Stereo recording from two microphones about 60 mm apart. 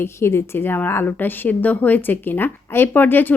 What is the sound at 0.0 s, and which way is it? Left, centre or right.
A woman's voice, left.